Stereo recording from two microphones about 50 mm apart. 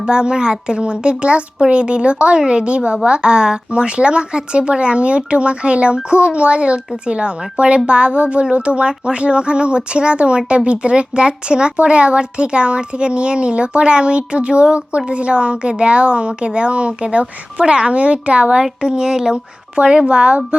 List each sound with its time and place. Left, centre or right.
0.0 s speech: centre